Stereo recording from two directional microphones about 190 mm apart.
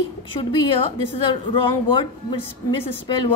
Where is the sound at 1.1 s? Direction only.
25° left (ahead or behind).